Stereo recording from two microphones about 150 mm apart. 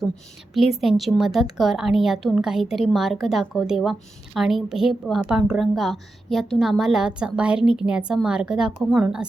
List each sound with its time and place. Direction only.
0.5 s a woman's voice: centre (ahead or behind)